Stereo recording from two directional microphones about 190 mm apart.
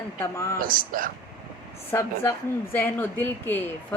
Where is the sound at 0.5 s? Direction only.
45° right (ahead or behind).